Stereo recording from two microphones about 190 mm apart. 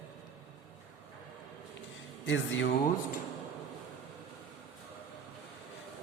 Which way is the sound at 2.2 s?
85° left.